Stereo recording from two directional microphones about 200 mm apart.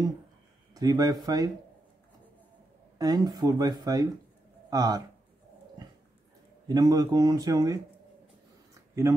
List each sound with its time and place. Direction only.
0.7 s speech: 20° right (ahead or behind)
3.0 s speech: 20° right (ahead or behind)
6.7 s speech: 20° right (ahead or behind)